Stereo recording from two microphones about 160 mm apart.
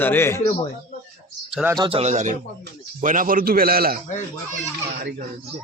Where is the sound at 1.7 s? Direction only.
30° right (ahead or behind).